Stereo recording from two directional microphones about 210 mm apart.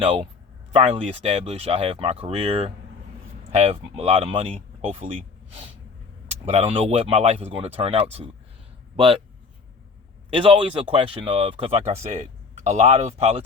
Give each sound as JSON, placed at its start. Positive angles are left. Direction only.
{"t": 0.7, "sound": "speech", "side_deg": -25}
{"t": 6.4, "sound": "speech", "side_deg": -30}
{"t": 10.2, "sound": "speech", "side_deg": -25}